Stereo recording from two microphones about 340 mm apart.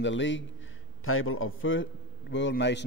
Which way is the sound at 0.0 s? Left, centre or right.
Left.